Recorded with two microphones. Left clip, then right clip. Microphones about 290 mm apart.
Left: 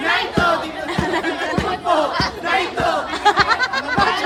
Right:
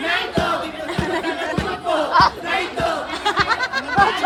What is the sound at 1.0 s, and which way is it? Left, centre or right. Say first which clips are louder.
Chatter: left 1 dB; centre.